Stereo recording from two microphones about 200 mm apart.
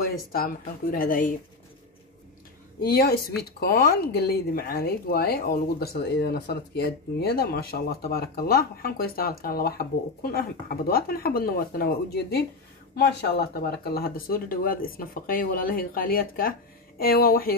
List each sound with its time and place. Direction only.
0.0 s speech: 50° left (ahead or behind)
2.8 s speech: 50° left (ahead or behind)